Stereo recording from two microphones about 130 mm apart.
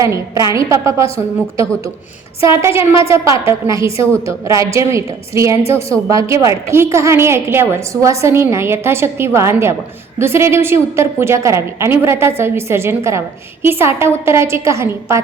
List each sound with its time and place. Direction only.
0.0 s a woman's voice: 25° right (ahead or behind)
2.4 s a woman's voice: 20° right (ahead or behind)